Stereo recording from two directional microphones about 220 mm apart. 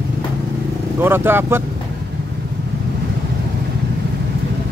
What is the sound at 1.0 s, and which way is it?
Speech, 10° right (ahead or behind).